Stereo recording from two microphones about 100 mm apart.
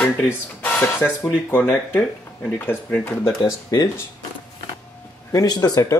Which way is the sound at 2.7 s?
20° left (ahead or behind).